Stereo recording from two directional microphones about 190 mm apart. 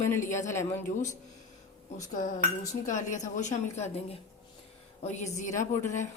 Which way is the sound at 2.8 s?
40° left (ahead or behind).